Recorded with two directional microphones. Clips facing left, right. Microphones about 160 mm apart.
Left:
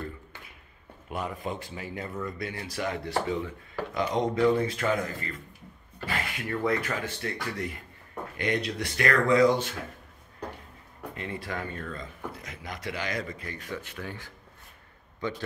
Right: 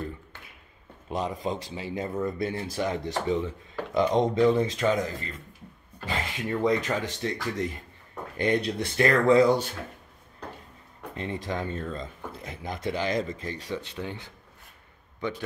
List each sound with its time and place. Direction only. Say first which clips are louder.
1.0 s speech: right 4 dB; 20° right (ahead or behind)
6.0 s speech: right 2 dB; 20° right (ahead or behind)
11.1 s speech: right 4 dB; 25° right (ahead or behind)